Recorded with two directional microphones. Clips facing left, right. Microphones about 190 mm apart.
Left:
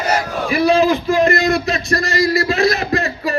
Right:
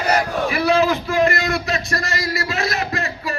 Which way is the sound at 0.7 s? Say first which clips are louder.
Left 4 dB; 15° left (ahead or behind).